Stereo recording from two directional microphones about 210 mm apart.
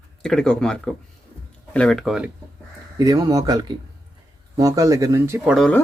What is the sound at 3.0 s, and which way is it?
Speech, 20° right (ahead or behind).